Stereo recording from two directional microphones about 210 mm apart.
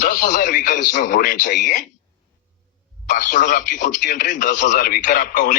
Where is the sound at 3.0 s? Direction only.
40° left (ahead or behind).